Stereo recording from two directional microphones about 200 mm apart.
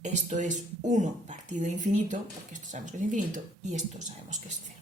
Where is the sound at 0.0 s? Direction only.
40° right (ahead or behind).